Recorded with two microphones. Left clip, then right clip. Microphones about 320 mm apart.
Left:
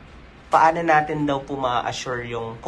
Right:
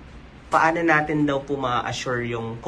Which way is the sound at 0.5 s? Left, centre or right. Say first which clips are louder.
Left 2 dB; centre.